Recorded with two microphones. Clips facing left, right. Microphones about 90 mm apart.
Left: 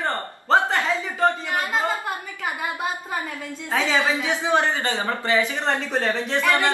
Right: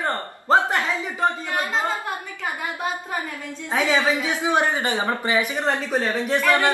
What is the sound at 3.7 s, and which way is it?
Speech, 15° right (ahead or behind).